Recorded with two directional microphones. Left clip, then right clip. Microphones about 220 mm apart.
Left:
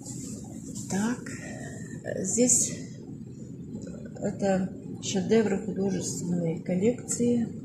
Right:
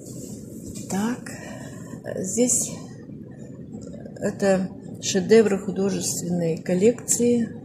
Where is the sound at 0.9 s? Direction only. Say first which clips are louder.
Right 3 dB; 15° right (ahead or behind).